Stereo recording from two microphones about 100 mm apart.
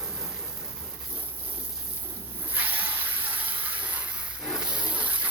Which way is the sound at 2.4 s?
15° right (ahead or behind).